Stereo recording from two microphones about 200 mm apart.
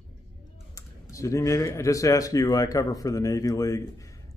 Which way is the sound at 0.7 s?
15° left (ahead or behind).